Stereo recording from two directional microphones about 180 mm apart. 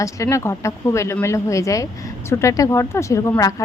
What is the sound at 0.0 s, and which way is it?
A woman's voice, 15° left (ahead or behind).